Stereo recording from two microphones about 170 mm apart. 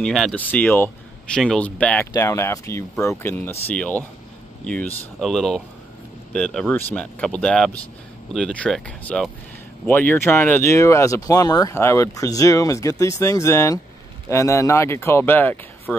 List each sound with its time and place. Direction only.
0.0 s speech: centre (ahead or behind)